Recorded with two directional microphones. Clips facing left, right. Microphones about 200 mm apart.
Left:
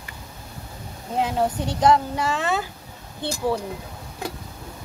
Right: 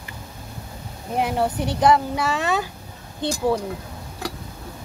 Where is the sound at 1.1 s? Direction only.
15° right (ahead or behind).